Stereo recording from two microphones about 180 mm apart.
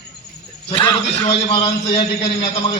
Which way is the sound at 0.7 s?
30° left (ahead or behind).